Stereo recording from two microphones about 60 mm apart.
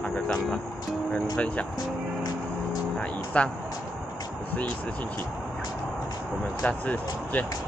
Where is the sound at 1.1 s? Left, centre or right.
Centre.